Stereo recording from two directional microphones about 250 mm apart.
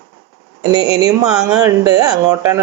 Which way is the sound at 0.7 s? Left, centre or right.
Centre.